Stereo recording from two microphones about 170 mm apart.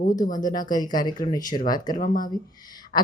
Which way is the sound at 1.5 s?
55° left (ahead or behind).